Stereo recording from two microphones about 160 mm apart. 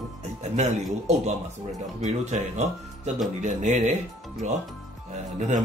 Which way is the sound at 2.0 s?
45° right (ahead or behind).